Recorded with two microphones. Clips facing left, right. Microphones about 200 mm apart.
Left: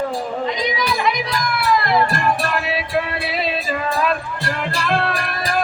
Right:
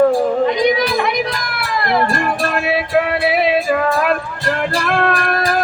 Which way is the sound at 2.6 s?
60° right (ahead or behind).